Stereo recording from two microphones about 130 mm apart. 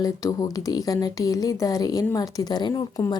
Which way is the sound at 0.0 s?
30° left (ahead or behind).